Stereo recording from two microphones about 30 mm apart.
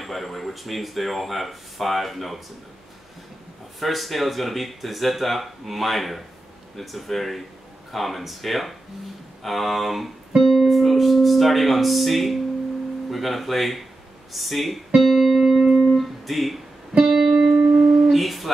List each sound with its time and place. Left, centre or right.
0.0 s speech: centre
3.8 s speech: centre
15.0 s music: centre
15.9 s guitar: centre
17.0 s music: centre
17.6 s music: right
18.1 s a sound: centre